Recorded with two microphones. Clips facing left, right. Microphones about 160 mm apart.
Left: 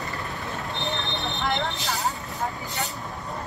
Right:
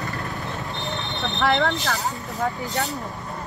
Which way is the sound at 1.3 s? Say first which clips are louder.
Right 8 dB; 75° right (ahead or behind).